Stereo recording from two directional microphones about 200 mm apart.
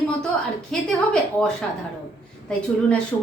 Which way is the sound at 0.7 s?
5° left (ahead or behind).